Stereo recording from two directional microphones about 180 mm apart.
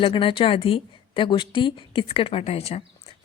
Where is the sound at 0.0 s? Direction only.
30° left (ahead or behind).